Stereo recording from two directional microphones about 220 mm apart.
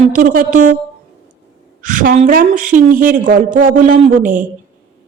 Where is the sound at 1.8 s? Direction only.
35° right (ahead or behind).